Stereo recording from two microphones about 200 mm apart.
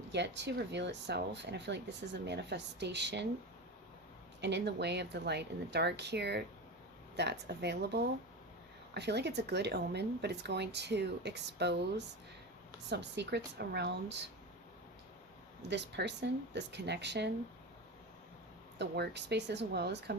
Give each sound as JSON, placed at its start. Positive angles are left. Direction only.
{"t": 0.1, "sound": "speech", "side_deg": -60}
{"t": 4.4, "sound": "speech", "side_deg": -60}
{"t": 15.7, "sound": "speech", "side_deg": -60}
{"t": 18.8, "sound": "speech", "side_deg": -60}